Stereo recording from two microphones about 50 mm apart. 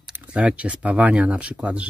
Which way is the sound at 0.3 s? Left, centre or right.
Right.